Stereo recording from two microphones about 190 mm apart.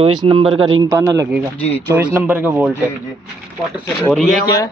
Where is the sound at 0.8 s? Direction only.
15° right (ahead or behind).